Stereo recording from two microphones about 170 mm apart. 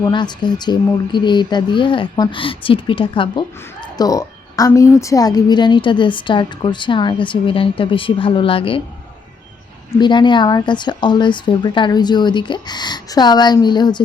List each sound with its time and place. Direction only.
0.0 s a woman's voice: 25° left (ahead or behind)
10.0 s a woman's voice: 25° left (ahead or behind)